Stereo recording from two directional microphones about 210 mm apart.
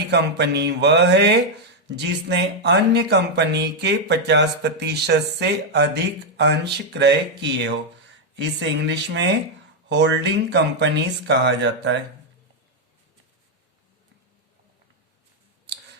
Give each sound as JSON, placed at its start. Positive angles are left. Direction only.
{"t": 0.1, "sound": "speech", "side_deg": -55}
{"t": 8.9, "sound": "speech", "side_deg": -55}